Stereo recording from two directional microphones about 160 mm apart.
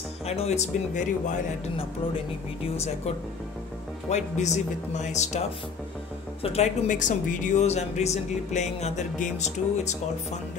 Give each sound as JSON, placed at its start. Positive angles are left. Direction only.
{"t": 0.3, "sound": "speech", "side_deg": 40}
{"t": 4.1, "sound": "speech", "side_deg": 45}
{"t": 6.4, "sound": "speech", "side_deg": 40}